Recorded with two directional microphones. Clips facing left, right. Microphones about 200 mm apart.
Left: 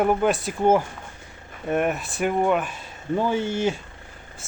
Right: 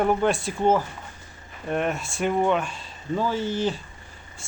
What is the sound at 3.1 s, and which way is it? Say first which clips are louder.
Speech: left 2 dB; 20° left (ahead or behind).